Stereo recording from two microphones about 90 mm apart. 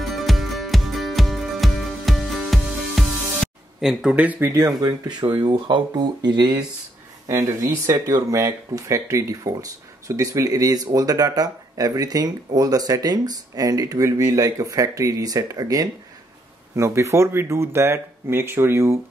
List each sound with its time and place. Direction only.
0.0 s music: centre (ahead or behind)
4.1 s speech: 20° right (ahead or behind)
4.6 s speech: 45° right (ahead or behind)
7.2 s speech: 35° right (ahead or behind)
16.7 s speech: 30° right (ahead or behind)